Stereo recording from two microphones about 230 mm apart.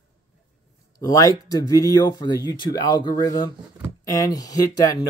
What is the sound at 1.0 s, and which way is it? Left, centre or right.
Speech, centre.